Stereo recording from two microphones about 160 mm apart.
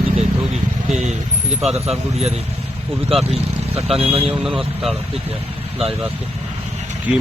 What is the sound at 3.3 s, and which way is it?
Speech, 40° right (ahead or behind).